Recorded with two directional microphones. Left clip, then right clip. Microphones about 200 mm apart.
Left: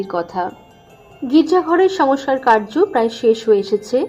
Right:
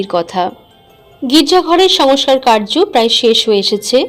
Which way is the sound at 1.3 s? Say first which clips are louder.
Right 5 dB; 30° right (ahead or behind).